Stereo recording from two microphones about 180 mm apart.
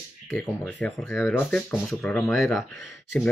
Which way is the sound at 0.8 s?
10° left (ahead or behind).